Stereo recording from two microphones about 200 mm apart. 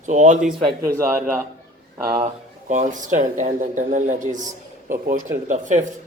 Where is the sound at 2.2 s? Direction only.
35° right (ahead or behind).